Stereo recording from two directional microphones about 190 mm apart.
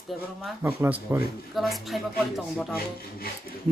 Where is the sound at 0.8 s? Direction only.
10° right (ahead or behind).